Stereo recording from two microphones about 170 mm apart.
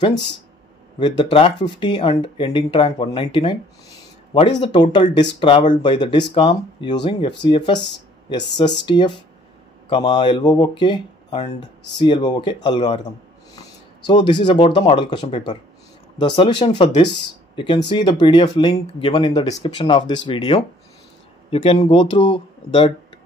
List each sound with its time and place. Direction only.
0.9 s speech: 30° left (ahead or behind)